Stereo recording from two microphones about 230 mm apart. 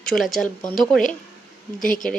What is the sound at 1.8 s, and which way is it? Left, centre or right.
Speech, left.